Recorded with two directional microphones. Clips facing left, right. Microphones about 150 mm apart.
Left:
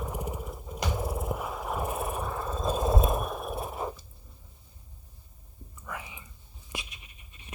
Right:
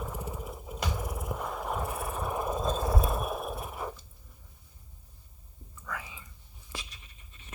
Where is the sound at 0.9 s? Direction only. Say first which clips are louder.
Left 4 dB; 25° left (ahead or behind).